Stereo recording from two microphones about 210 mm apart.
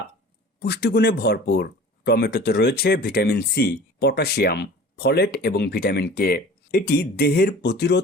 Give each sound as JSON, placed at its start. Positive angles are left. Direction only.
{"t": 0.6, "sound": "speech", "side_deg": 50}